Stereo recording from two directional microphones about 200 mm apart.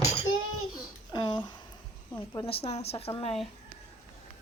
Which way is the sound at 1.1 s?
25° left (ahead or behind).